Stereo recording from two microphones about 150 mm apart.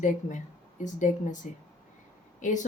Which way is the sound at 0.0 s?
55° left (ahead or behind).